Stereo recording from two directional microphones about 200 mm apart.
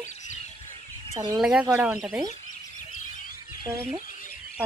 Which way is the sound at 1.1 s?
25° right (ahead or behind).